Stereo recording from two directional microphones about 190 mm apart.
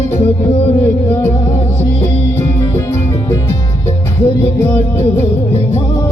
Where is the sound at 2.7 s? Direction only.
15° left (ahead or behind).